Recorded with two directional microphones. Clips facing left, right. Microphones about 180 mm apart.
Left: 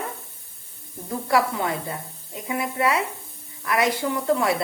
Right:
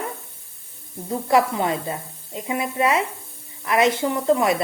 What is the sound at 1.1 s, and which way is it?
Speech, 20° right (ahead or behind).